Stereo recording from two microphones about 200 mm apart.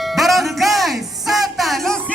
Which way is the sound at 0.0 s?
Centre (ahead or behind).